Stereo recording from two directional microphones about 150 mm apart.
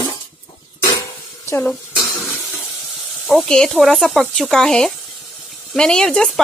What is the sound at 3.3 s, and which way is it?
Speech, centre (ahead or behind).